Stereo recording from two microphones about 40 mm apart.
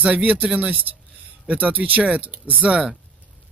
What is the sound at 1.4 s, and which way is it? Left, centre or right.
Speech, right.